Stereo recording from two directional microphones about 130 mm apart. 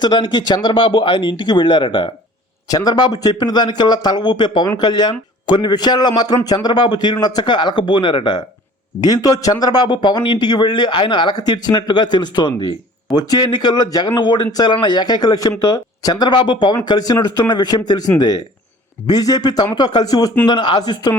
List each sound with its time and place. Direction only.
0.0 s a man's voice: 35° left (ahead or behind)